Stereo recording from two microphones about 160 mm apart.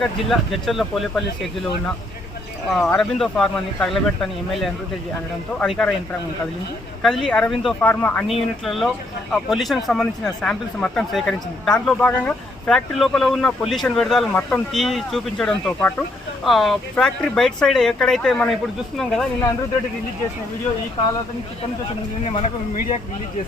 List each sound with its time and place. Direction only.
0.0 s speech: centre (ahead or behind)
2.6 s speech: centre (ahead or behind)
7.0 s speech: 5° left (ahead or behind)
8.3 s speech: centre (ahead or behind)
22.2 s speech: 40° left (ahead or behind)